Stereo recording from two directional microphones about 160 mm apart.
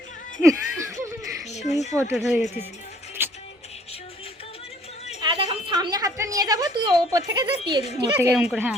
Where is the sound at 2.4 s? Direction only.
45° left (ahead or behind).